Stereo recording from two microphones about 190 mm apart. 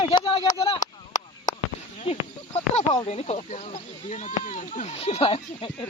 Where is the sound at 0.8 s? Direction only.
40° left (ahead or behind).